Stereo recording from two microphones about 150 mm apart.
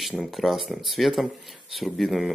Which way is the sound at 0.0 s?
Centre (ahead or behind).